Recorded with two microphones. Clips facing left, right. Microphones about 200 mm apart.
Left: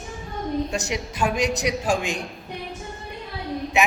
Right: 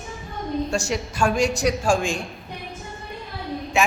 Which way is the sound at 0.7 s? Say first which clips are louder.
Right 3 dB; 20° left (ahead or behind).